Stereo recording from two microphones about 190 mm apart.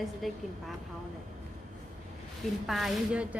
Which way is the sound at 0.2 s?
Centre (ahead or behind).